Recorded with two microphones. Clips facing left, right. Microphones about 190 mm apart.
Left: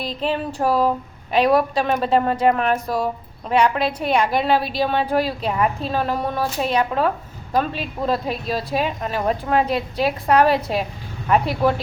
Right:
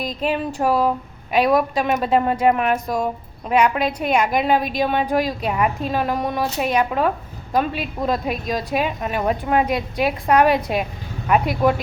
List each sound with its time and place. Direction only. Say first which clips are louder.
0.0 s a woman's voice: right 1 dB; 10° right (ahead or behind)